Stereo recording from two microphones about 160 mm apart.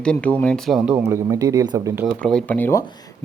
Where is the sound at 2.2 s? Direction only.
5° left (ahead or behind).